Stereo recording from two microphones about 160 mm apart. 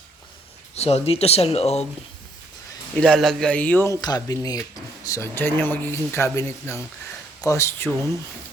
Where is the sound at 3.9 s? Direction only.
25° left (ahead or behind).